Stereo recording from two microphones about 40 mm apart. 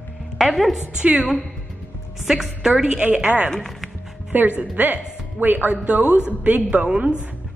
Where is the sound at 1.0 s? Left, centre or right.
Right.